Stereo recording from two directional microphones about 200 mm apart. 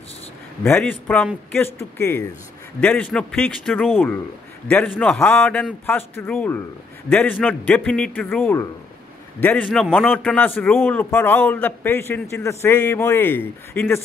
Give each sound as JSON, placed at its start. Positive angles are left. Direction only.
{"t": 0.7, "sound": "a man's voice", "side_deg": 10}